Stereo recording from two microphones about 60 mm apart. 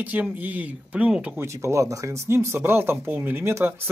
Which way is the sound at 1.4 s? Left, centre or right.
Right.